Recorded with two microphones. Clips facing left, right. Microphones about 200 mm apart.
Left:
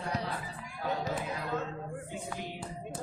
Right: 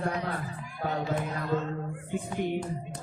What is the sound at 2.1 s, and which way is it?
Music, 55° right (ahead or behind).